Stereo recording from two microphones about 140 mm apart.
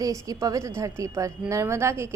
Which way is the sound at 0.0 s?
25° right (ahead or behind).